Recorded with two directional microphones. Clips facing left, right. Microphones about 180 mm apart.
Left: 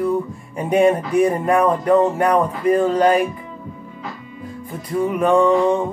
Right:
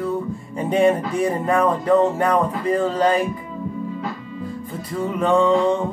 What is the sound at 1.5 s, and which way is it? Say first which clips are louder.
Music: left 2 dB; 10° left (ahead or behind).